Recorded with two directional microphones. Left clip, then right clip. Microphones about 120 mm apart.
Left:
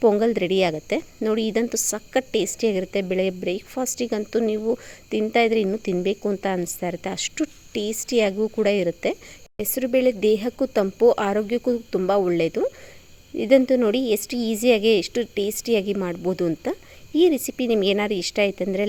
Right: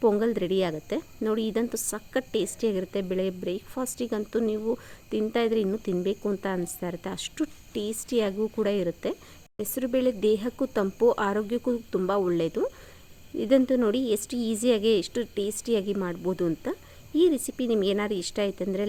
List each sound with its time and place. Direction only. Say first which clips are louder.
0.0 s a woman's voice: left 5 dB; 30° left (ahead or behind)